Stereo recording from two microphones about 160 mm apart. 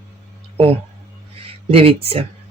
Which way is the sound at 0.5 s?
40° right (ahead or behind).